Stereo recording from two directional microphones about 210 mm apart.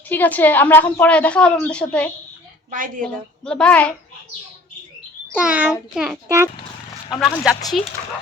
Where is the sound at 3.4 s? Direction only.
5° left (ahead or behind).